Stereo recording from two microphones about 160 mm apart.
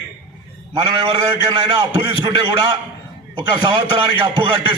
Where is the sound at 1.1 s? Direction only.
25° right (ahead or behind).